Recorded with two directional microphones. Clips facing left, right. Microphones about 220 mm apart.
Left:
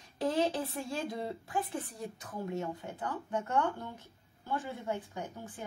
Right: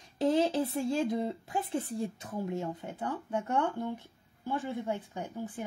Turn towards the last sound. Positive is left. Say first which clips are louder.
# right 5 dB
turn(degrees=-20)  # may be behind; listen again after turning